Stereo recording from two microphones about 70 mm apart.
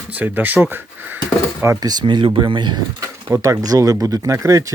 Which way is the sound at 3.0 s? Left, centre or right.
Right.